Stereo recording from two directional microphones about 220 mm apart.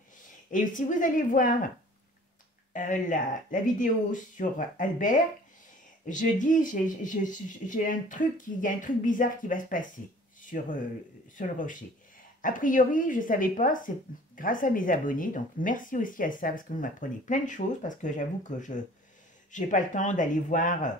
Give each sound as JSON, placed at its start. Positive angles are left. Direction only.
{"t": 0.5, "sound": "speech", "side_deg": 35}
{"t": 2.7, "sound": "speech", "side_deg": 35}